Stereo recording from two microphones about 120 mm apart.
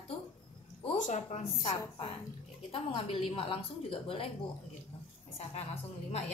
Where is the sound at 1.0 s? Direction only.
75° left (ahead or behind).